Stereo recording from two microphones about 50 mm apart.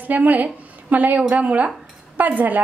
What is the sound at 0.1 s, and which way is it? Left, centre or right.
A woman's voice, right.